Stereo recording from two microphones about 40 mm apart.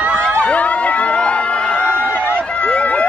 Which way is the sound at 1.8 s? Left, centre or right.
Left.